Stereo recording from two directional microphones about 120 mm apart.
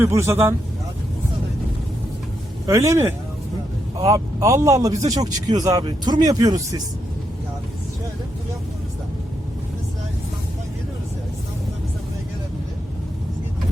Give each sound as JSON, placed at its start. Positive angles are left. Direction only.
{"t": 0.0, "sound": "a man's voice", "side_deg": -25}
{"t": 2.6, "sound": "a man's voice", "side_deg": -25}